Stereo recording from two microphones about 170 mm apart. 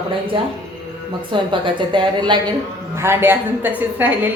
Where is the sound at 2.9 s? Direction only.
15° right (ahead or behind).